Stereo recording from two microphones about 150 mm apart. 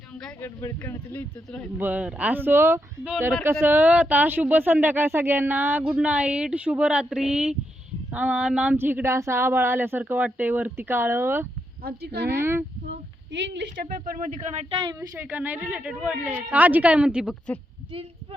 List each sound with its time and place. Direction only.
0.4 s speech: 20° left (ahead or behind)
1.1 s speech: 5° left (ahead or behind)
1.8 s speech: 10° right (ahead or behind)
11.8 s speech: 90° right
12.3 s speech: 15° right (ahead or behind)
14.0 s speech: 55° right (ahead or behind)
15.2 s speech: 10° right (ahead or behind)